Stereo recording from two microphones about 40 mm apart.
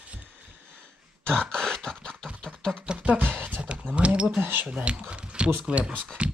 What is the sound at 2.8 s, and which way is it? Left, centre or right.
Speech, right.